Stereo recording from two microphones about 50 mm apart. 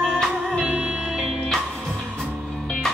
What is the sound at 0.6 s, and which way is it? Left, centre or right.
Music, right.